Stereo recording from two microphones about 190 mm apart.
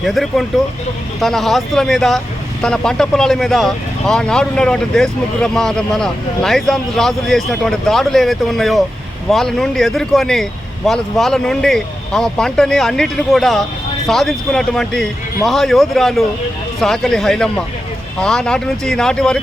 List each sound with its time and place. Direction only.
0.0 s speech: centre (ahead or behind)